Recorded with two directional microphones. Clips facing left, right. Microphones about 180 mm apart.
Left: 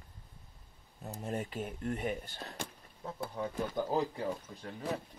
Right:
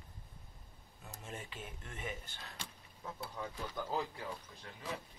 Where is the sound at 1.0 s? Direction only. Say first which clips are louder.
Left 10 dB; 40° left (ahead or behind).